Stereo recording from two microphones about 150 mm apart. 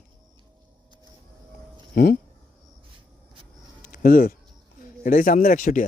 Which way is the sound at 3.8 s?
75° left (ahead or behind).